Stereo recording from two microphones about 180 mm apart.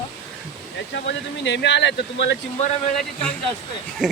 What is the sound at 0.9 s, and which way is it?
Speech, 75° left (ahead or behind).